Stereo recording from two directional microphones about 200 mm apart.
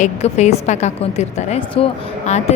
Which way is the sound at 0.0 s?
35° left (ahead or behind).